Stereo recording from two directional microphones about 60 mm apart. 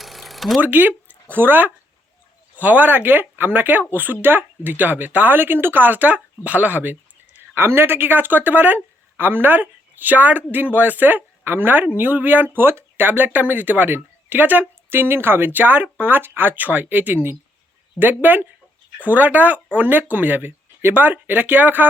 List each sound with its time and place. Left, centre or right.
0.0 s a sound: centre
0.6 s speech: right
7.5 s speech: right
14.8 s speech: right